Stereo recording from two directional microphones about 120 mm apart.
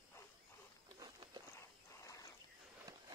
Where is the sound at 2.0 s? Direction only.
30° left (ahead or behind).